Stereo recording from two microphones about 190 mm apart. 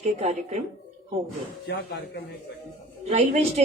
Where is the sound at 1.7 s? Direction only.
60° left (ahead or behind).